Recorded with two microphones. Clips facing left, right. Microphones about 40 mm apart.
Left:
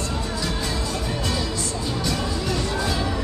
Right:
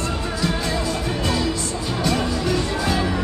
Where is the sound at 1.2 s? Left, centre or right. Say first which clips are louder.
Right 4 dB; centre.